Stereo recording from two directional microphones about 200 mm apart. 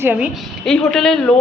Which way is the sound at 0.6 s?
Centre (ahead or behind).